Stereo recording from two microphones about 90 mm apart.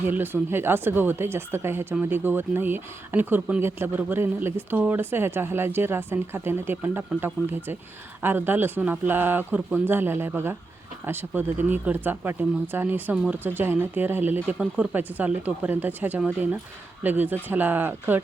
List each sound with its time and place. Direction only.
0.0 s speech: 25° right (ahead or behind)